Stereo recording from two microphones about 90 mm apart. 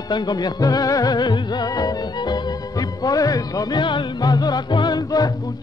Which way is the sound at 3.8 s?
60° left (ahead or behind).